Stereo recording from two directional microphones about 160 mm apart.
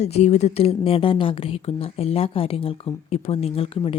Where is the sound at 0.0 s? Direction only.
45° left (ahead or behind).